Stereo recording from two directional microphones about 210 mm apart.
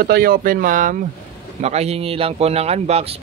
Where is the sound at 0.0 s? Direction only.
45° right (ahead or behind).